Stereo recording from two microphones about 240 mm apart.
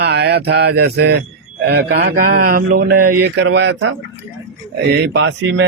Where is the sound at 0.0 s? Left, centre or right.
Right.